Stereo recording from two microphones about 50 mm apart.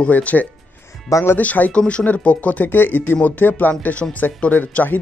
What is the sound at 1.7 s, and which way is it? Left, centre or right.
Speech, left.